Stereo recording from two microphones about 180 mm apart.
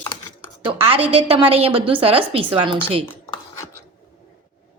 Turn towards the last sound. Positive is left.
turn(degrees=-30)  # may be behind; listen again after turning